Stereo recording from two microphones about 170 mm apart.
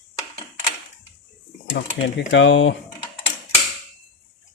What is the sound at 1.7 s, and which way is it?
Speech, 90° left.